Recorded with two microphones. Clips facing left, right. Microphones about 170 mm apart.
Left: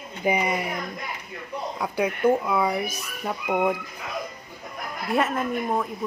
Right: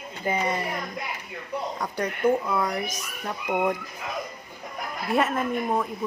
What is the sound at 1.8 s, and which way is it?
Speech, 10° left (ahead or behind).